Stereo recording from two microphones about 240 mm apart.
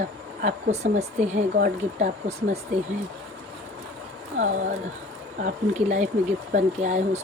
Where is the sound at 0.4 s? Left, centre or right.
Right.